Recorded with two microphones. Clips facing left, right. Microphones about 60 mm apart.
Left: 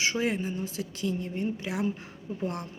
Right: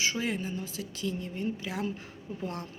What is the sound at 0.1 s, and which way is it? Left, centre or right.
A woman's voice, left.